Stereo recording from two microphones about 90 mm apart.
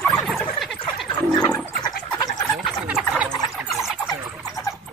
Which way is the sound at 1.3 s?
50° left (ahead or behind).